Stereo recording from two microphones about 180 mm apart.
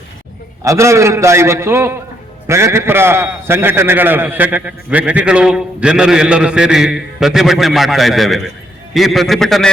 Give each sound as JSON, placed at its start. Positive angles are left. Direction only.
{"t": 0.6, "sound": "a man's voice", "side_deg": -15}